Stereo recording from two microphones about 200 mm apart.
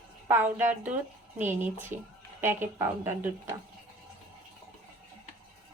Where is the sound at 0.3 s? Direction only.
10° right (ahead or behind).